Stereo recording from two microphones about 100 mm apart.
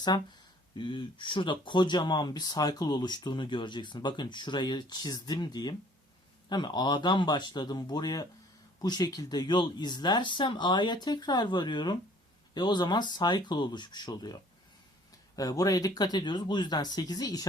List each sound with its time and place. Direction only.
0.1 s speech: 45° left (ahead or behind)
0.8 s speech: 55° left (ahead or behind)
15.4 s speech: 35° left (ahead or behind)